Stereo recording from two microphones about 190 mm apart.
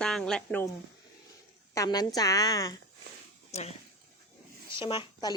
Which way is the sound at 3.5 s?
35° left (ahead or behind).